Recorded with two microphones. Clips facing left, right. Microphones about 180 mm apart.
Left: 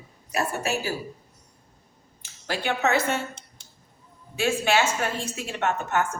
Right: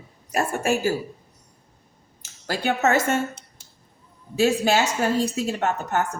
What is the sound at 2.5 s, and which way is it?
Speech, 45° right (ahead or behind).